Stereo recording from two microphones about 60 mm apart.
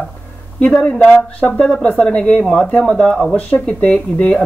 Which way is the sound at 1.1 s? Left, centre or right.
Left.